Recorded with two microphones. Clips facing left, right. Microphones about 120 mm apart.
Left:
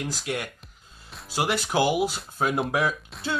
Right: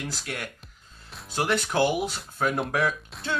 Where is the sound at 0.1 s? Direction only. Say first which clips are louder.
Left 4 dB; 15° left (ahead or behind).